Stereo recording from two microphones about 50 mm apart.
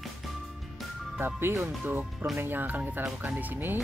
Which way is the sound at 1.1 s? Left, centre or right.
Right.